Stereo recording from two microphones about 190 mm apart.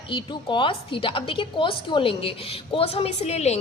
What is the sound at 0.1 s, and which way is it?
A woman's voice, 25° left (ahead or behind).